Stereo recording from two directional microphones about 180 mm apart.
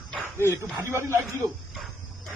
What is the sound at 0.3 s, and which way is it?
Speech, 15° right (ahead or behind).